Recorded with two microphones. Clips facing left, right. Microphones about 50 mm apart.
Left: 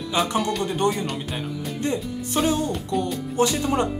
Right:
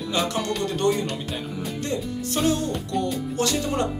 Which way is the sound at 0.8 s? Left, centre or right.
Centre.